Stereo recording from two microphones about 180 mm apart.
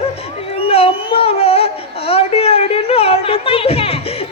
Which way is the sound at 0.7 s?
35° left (ahead or behind).